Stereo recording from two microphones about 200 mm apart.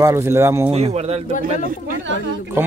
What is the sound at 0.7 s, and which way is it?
Speech, 30° right (ahead or behind).